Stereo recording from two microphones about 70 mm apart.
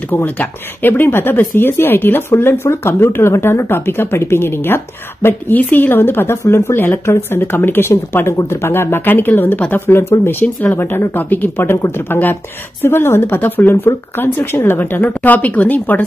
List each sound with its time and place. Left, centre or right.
0.1 s speech: left